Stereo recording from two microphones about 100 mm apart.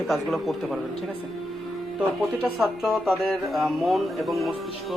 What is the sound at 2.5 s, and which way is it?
A man's voice, centre (ahead or behind).